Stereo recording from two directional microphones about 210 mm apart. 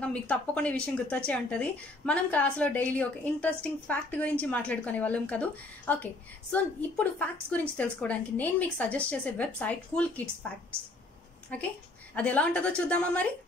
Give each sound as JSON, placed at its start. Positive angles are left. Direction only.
{"t": 0.0, "sound": "a woman's voice", "side_deg": 5}
{"t": 11.5, "sound": "a woman's voice", "side_deg": 5}